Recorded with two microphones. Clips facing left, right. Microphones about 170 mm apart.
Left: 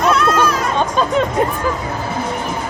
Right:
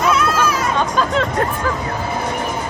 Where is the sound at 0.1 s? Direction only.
5° right (ahead or behind).